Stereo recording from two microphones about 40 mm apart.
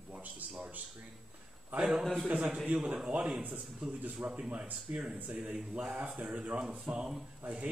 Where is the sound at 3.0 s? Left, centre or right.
Right.